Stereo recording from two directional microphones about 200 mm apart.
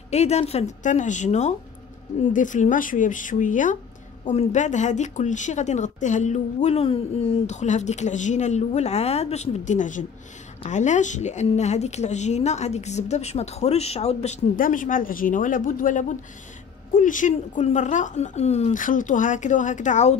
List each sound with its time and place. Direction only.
0.1 s speech: 35° left (ahead or behind)